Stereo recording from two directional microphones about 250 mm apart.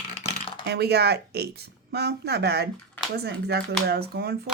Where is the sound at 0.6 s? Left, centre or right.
Right.